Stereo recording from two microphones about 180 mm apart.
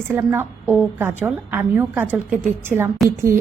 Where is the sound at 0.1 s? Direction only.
10° right (ahead or behind).